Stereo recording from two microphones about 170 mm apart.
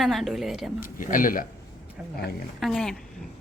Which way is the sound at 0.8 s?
55° left (ahead or behind).